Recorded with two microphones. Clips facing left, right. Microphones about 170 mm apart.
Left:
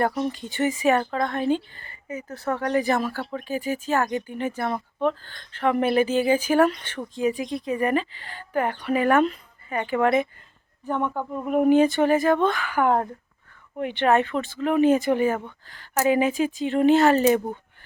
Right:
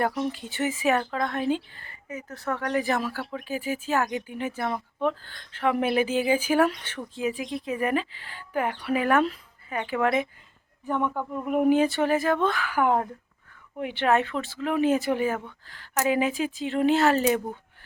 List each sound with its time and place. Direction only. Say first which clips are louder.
0.2 s speech: left 3 dB; 5° right (ahead or behind)
2.5 s speech: left 3 dB; 30° left (ahead or behind)
2.7 s speech: left 3 dB; centre (ahead or behind)
11.3 s speech: left 3 dB; 5° right (ahead or behind)